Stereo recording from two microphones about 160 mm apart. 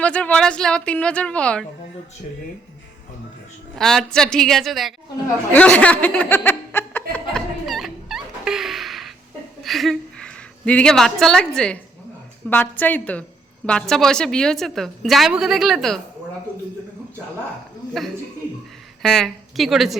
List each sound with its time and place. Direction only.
0.0 s a woman's voice: 5° left (ahead or behind)
3.8 s a woman's voice: 5° left (ahead or behind)
7.3 s turkey: centre (ahead or behind)
9.6 s a woman's voice: centre (ahead or behind)
19.0 s a woman's voice: centre (ahead or behind)